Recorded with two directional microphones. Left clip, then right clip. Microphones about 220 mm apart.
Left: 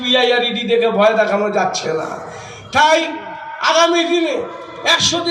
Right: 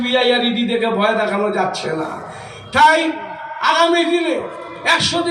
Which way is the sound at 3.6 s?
20° left (ahead or behind).